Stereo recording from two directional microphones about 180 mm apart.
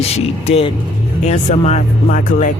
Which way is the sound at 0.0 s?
35° left (ahead or behind).